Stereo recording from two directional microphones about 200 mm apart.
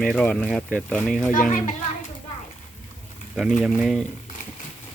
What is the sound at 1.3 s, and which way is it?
Speech, 40° left (ahead or behind).